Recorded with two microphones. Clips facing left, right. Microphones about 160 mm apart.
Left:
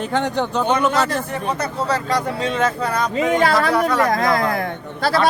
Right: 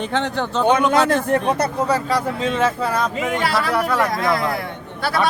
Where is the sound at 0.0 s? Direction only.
10° left (ahead or behind).